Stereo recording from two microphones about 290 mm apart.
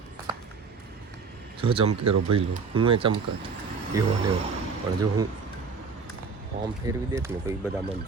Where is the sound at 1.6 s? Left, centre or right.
Centre.